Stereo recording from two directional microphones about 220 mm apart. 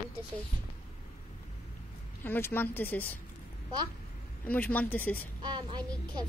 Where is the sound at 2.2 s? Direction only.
10° left (ahead or behind).